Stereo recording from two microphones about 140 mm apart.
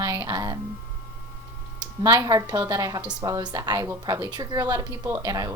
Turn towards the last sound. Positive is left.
turn(degrees=-25)  # may be behind; listen again after turning